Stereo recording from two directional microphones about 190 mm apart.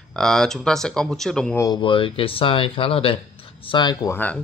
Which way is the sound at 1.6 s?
25° left (ahead or behind).